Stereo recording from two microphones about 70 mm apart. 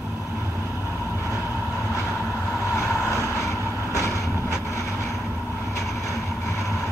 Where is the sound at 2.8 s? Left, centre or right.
Left.